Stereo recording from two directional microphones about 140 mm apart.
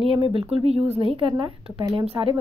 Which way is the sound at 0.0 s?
40° right (ahead or behind).